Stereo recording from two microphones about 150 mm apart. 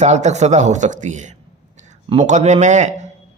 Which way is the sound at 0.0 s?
50° right (ahead or behind).